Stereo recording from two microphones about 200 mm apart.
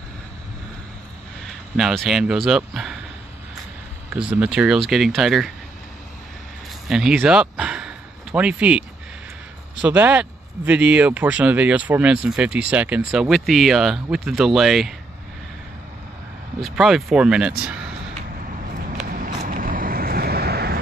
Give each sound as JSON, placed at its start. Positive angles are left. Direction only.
{"t": 1.8, "sound": "speech", "side_deg": 0}
{"t": 4.1, "sound": "speech", "side_deg": -5}
{"t": 6.9, "sound": "speech", "side_deg": -5}
{"t": 16.6, "sound": "speech", "side_deg": 0}
{"t": 19.1, "sound": "vehicle", "side_deg": -40}